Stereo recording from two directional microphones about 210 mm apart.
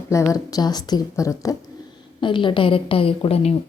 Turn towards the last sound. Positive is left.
turn(degrees=25)  # may be behind; listen again after turning